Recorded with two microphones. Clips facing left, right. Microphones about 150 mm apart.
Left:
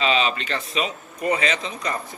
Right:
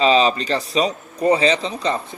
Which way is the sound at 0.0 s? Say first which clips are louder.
Right 6 dB; 35° right (ahead or behind).